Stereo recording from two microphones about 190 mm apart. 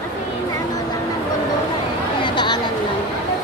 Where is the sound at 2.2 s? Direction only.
25° left (ahead or behind).